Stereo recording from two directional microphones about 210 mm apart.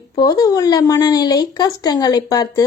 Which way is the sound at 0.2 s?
20° left (ahead or behind).